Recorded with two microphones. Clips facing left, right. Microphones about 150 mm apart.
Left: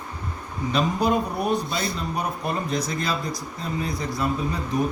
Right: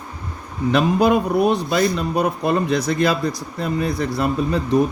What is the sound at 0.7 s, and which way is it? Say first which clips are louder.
A man's voice: right 6 dB; 90° right.